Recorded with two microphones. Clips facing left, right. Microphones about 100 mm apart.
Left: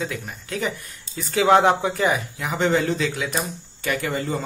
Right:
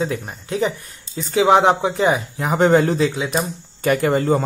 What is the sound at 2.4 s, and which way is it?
Speech, 45° right (ahead or behind).